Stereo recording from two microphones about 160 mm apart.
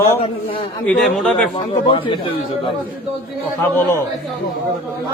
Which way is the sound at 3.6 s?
15° left (ahead or behind).